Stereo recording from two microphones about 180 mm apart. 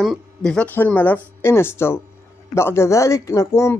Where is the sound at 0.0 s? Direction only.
Centre (ahead or behind).